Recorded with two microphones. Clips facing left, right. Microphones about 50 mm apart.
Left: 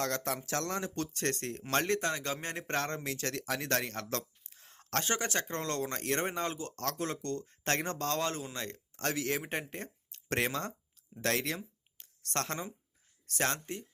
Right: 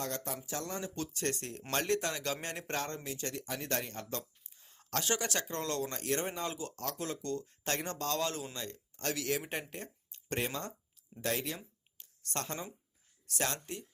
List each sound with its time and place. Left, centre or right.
0.0 s speech: left
0.4 s speech: left
5.0 s speech: left
5.9 s speech: left
8.5 s speech: left
10.2 s speech: left
13.2 s speech: left